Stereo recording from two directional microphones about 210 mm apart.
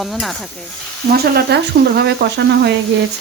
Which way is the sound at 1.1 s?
50° right (ahead or behind).